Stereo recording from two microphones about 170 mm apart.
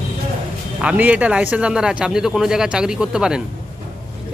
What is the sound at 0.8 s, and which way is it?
Speech, 5° right (ahead or behind).